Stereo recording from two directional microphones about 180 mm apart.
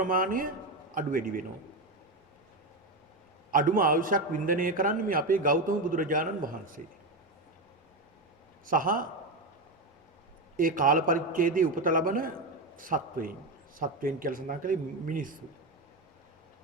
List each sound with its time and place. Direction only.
0.0 s a man's voice: 50° right (ahead or behind)
3.5 s a man's voice: 50° right (ahead or behind)
8.6 s a man's voice: 50° right (ahead or behind)
10.6 s a man's voice: 50° right (ahead or behind)